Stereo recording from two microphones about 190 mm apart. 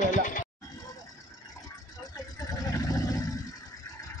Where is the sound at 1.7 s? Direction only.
20° left (ahead or behind).